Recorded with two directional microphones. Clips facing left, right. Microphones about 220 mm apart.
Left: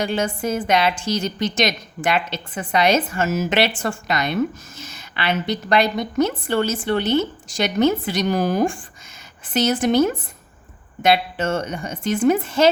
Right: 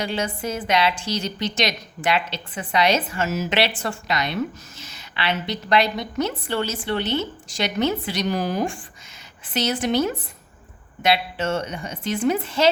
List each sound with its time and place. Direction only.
0.0 s a woman's voice: 50° left (ahead or behind)